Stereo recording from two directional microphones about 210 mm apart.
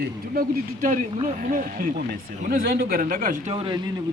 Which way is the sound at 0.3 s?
40° right (ahead or behind).